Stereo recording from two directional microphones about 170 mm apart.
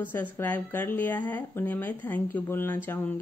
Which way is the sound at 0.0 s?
10° left (ahead or behind).